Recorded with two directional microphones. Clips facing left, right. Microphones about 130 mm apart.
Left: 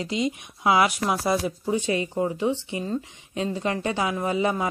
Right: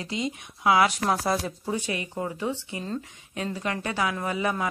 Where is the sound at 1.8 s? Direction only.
30° left (ahead or behind).